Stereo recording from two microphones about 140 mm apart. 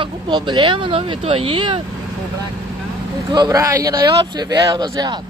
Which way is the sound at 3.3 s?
30° right (ahead or behind).